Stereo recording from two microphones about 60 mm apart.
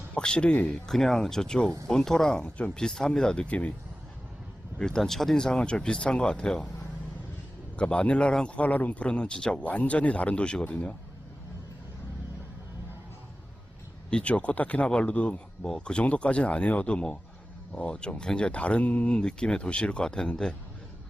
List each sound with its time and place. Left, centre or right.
0.1 s speech: centre
4.8 s speech: centre
7.8 s speech: centre
14.1 s speech: centre